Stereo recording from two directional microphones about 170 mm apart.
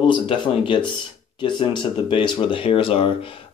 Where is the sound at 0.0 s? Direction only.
30° left (ahead or behind).